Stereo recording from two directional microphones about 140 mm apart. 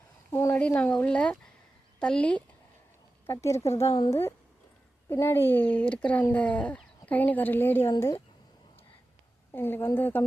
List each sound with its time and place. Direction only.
0.3 s speech: 20° left (ahead or behind)
3.2 s speech: 20° left (ahead or behind)
9.5 s speech: 15° left (ahead or behind)